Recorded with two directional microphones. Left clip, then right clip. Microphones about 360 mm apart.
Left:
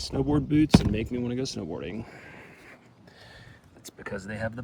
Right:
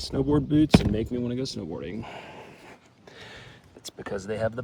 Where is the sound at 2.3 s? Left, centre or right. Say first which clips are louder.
Right 3 dB; centre.